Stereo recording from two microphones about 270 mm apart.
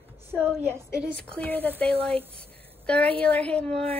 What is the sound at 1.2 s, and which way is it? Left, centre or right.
Speech, centre.